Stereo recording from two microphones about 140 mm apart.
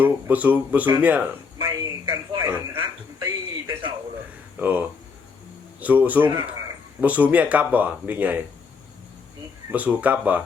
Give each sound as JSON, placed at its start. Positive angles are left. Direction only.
{"t": 0.0, "sound": "speech", "side_deg": -10}
{"t": 1.5, "sound": "a sound", "side_deg": -15}
{"t": 4.6, "sound": "speech", "side_deg": -10}
{"t": 9.7, "sound": "speech", "side_deg": -10}